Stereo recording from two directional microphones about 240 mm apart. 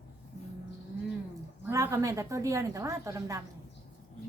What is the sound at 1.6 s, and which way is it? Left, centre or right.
A woman's voice, centre.